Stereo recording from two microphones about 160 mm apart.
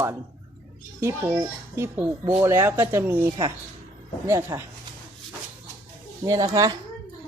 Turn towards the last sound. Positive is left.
turn(degrees=-20)  # may be behind; listen again after turning